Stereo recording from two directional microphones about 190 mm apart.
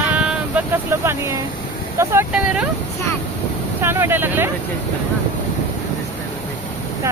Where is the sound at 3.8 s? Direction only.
10° right (ahead or behind).